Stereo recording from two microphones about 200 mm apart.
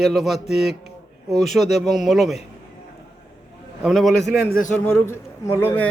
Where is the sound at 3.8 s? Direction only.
Centre (ahead or behind).